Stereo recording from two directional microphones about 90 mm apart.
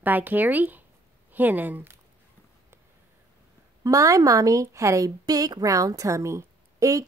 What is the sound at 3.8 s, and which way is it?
A woman's voice, 40° right (ahead or behind).